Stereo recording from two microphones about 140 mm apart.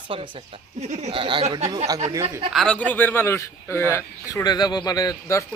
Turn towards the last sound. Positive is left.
turn(degrees=25)  # may be behind; listen again after turning